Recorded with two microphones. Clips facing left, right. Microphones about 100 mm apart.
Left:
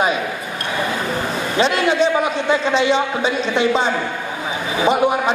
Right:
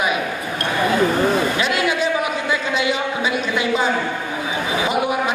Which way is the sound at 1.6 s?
30° left (ahead or behind).